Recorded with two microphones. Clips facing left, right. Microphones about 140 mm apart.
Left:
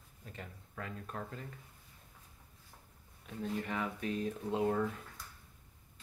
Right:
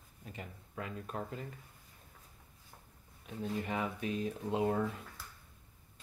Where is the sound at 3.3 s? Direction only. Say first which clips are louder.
Right 1 dB; 20° right (ahead or behind).